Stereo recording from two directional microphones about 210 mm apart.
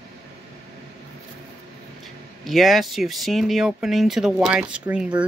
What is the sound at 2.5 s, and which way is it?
Speech, centre (ahead or behind).